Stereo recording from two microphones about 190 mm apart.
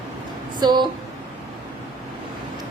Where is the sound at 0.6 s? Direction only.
20° right (ahead or behind).